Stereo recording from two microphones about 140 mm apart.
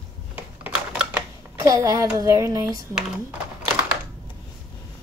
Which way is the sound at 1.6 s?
25° right (ahead or behind).